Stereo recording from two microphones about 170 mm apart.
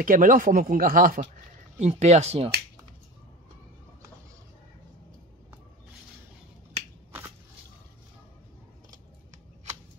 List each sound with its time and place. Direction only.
0.0 s speech: 50° right (ahead or behind)
1.8 s speech: 40° right (ahead or behind)